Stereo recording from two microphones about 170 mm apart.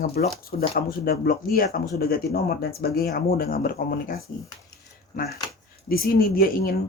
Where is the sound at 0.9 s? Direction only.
60° left (ahead or behind).